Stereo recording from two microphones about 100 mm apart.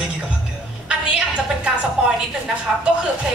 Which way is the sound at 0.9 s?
10° right (ahead or behind).